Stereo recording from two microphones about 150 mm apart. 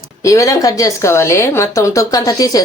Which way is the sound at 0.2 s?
20° left (ahead or behind).